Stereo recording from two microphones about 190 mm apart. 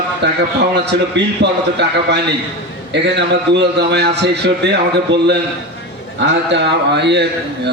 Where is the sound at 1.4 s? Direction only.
65° right (ahead or behind).